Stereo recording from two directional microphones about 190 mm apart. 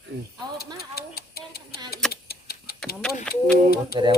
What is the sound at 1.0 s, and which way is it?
Tick-tock, 55° left (ahead or behind).